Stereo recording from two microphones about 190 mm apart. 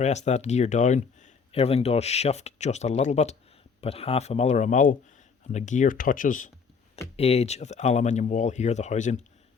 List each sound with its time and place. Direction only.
0.0 s speech: 35° left (ahead or behind)
7.2 s speech: 35° left (ahead or behind)